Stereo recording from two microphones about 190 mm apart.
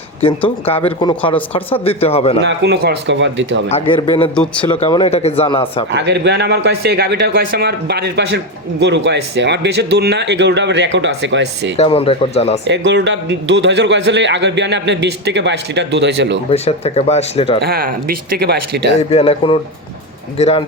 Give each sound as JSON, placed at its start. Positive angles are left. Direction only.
{"t": 0.2, "sound": "speech", "side_deg": 30}
{"t": 2.4, "sound": "a man's voice", "side_deg": -65}
{"t": 3.7, "sound": "speech", "side_deg": 30}
{"t": 4.4, "sound": "speech", "side_deg": 5}
{"t": 5.0, "sound": "speech", "side_deg": 35}
{"t": 5.9, "sound": "speech", "side_deg": -60}
{"t": 11.8, "sound": "speech", "side_deg": 30}
{"t": 12.6, "sound": "a man's voice", "side_deg": -65}
{"t": 16.5, "sound": "speech", "side_deg": 30}
{"t": 17.6, "sound": "speech", "side_deg": -55}
{"t": 19.1, "sound": "speech", "side_deg": 30}